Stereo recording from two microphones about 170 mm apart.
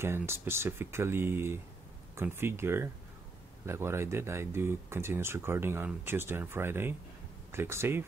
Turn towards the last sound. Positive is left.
turn(degrees=-15)  # may be behind; listen again after turning